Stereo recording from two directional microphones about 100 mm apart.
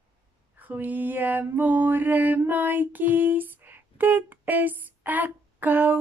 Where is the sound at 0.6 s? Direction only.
15° right (ahead or behind).